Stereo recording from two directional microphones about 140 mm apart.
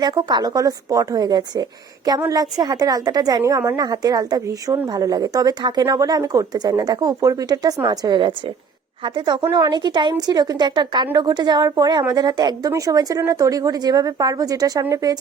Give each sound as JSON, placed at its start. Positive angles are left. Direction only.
{"t": 0.0, "sound": "a woman's voice", "side_deg": -30}